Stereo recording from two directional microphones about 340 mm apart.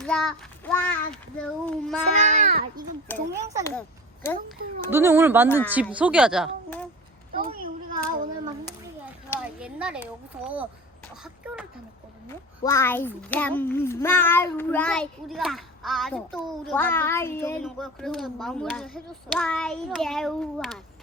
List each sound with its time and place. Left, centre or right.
0.0 s child singing: centre
1.4 s a child's voice: centre
2.1 s a child's voice: right
3.1 s a child's voice: centre
4.9 s a child's voice: centre
7.4 s a child's voice: right
9.3 s a child's voice: centre
12.3 s a child's voice: centre